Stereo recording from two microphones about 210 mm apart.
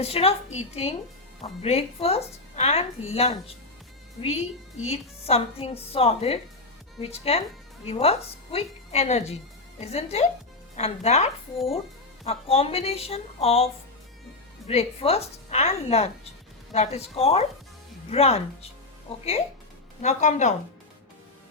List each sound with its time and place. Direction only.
0.0 s a woman's voice: 30° left (ahead or behind)
4.9 s a woman's voice: 30° left (ahead or behind)
14.7 s a woman's voice: 30° left (ahead or behind)
20.0 s speech: 35° left (ahead or behind)